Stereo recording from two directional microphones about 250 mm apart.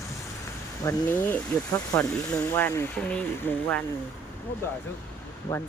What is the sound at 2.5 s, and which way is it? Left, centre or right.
Speech, centre.